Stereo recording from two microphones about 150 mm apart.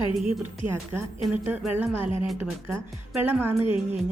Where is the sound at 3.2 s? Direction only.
15° right (ahead or behind).